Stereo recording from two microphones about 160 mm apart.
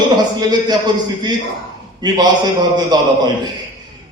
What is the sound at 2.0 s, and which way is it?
Speech, 25° right (ahead or behind).